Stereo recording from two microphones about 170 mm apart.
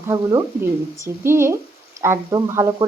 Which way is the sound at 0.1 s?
20° right (ahead or behind).